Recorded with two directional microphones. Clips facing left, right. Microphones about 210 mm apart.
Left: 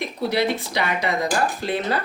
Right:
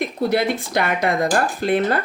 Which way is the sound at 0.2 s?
50° right (ahead or behind).